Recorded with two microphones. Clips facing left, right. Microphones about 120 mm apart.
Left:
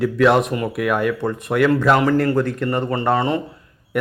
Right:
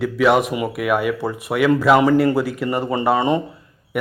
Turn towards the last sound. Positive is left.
turn(degrees=-5)  # may be behind; listen again after turning